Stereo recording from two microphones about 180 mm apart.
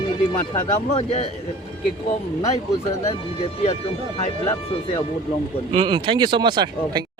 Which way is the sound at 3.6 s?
35° left (ahead or behind).